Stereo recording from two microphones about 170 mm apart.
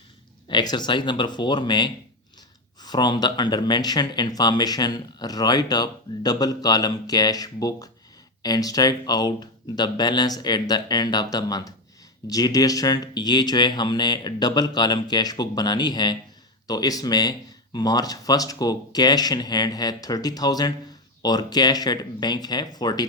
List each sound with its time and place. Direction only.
0.4 s speech: 25° left (ahead or behind)